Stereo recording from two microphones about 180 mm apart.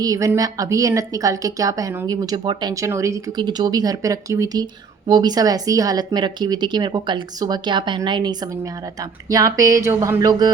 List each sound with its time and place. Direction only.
0.0 s a woman's voice: 20° right (ahead or behind)